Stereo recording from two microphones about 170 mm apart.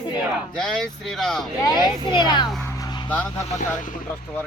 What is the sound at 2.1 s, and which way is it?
Speech, 25° left (ahead or behind).